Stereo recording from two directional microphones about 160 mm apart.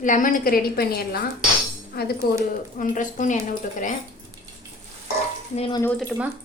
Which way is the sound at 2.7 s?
55° left (ahead or behind).